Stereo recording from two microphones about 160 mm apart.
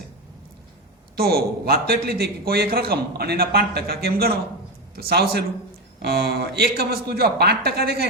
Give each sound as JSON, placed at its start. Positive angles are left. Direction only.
{"t": 1.1, "sound": "a man's voice", "side_deg": -75}